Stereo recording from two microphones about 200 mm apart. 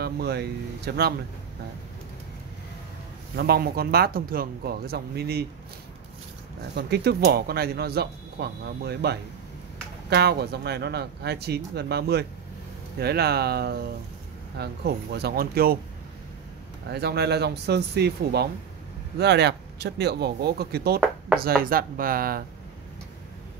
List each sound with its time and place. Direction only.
0.0 s speech: 55° right (ahead or behind)
3.3 s speech: 50° right (ahead or behind)
6.7 s speech: 55° right (ahead or behind)
16.9 s speech: 55° right (ahead or behind)